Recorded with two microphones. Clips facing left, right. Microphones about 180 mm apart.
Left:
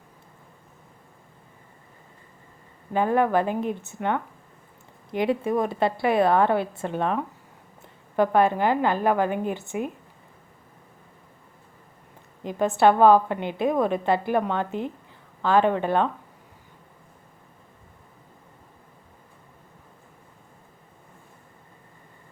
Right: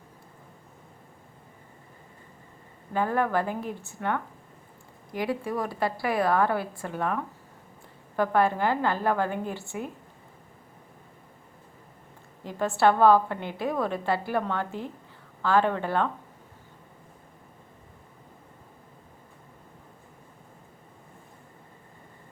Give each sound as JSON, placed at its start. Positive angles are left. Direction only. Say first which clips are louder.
{"t": 2.9, "sound": "a woman's voice", "louder": "left 4 dB", "side_deg": 20}
{"t": 12.4, "sound": "a woman's voice", "louder": "left 4 dB", "side_deg": 20}